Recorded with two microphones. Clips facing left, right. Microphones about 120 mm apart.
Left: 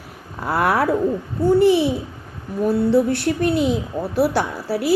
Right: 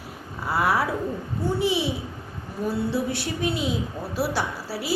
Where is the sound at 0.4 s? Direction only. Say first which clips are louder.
Left 5 dB; 55° left (ahead or behind).